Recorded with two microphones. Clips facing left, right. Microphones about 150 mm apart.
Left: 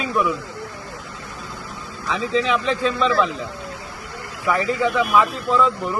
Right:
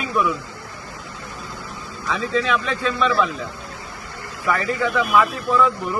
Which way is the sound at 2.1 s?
25° left (ahead or behind).